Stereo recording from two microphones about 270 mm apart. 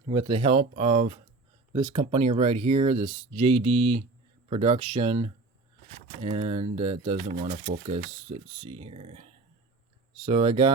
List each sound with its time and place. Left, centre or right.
0.1 s speech: centre
10.2 s speech: right